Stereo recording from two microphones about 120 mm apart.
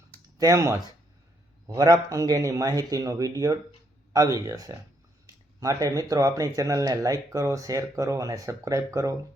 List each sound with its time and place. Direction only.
0.3 s speech: 30° right (ahead or behind)